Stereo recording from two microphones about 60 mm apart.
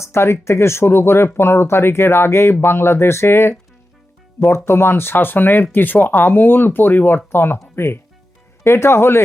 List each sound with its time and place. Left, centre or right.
0.0 s speech: left
8.6 s speech: left